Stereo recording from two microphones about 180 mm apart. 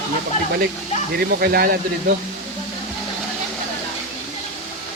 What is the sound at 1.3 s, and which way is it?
Speech, 60° right (ahead or behind).